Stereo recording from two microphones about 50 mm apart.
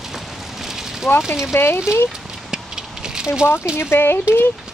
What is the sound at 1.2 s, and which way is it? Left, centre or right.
Speech, centre.